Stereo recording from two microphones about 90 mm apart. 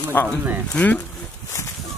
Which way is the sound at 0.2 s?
20° left (ahead or behind).